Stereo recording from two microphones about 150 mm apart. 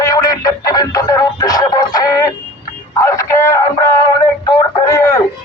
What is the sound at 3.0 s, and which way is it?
Synthetic singing, 20° left (ahead or behind).